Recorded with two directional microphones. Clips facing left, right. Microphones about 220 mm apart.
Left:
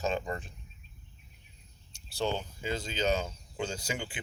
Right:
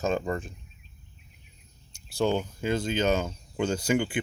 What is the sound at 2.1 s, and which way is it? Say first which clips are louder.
Speech: right 7 dB; 50° right (ahead or behind).